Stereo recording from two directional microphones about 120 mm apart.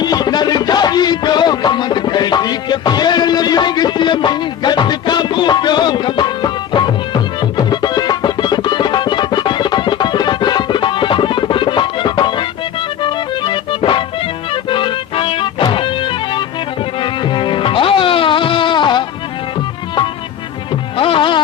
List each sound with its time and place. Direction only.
0.0 s music: 35° left (ahead or behind)
17.0 s music: 40° left (ahead or behind)
21.0 s music: 45° left (ahead or behind)